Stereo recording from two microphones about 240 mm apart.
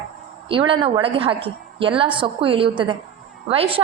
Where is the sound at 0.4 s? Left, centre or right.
Right.